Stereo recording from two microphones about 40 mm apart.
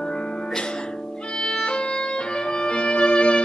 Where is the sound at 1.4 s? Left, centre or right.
Centre.